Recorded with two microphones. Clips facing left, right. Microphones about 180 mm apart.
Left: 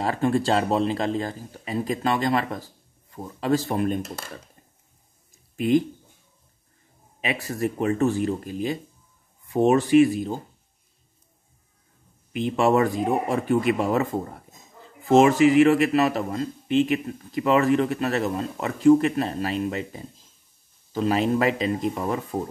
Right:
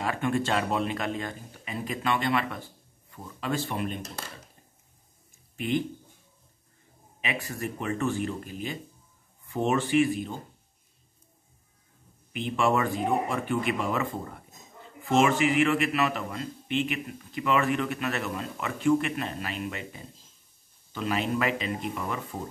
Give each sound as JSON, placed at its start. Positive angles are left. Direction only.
{"t": 0.0, "sound": "a man's voice", "side_deg": 35}
{"t": 5.6, "sound": "a man's voice", "side_deg": 40}
{"t": 7.2, "sound": "a man's voice", "side_deg": 35}
{"t": 12.3, "sound": "a man's voice", "side_deg": 35}